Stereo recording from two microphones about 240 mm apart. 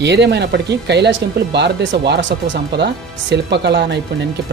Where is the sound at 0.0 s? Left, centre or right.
Right.